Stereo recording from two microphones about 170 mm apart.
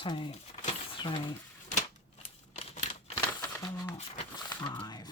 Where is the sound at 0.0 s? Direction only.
30° left (ahead or behind).